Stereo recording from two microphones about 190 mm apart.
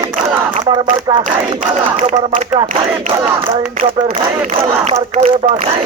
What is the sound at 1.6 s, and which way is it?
Speech, 40° right (ahead or behind).